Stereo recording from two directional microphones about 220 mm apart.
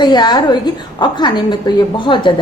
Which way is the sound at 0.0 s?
20° left (ahead or behind).